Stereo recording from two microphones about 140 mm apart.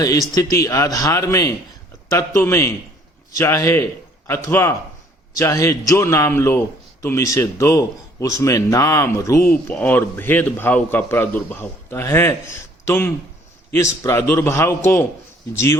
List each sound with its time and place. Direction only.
0.0 s a man's voice: 25° left (ahead or behind)